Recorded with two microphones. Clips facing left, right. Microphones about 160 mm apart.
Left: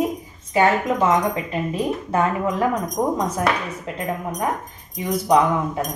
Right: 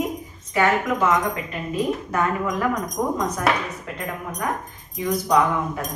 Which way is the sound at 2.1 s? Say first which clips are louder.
Left 3 dB; 25° left (ahead or behind).